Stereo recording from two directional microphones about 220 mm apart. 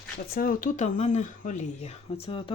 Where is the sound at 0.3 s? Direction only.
40° left (ahead or behind).